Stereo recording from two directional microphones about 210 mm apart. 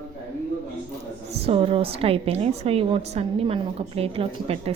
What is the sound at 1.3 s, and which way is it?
A woman's voice, 30° right (ahead or behind).